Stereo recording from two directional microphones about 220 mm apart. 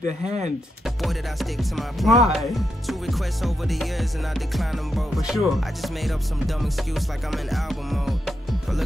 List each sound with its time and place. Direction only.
0.0 s speech: 30° right (ahead or behind)
0.8 s music: centre (ahead or behind)